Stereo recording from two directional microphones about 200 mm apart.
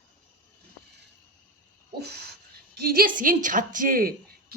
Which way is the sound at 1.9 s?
55° right (ahead or behind).